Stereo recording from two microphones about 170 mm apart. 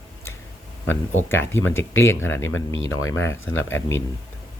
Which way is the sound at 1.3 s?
15° left (ahead or behind).